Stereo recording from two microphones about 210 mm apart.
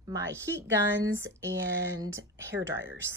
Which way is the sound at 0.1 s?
10° right (ahead or behind).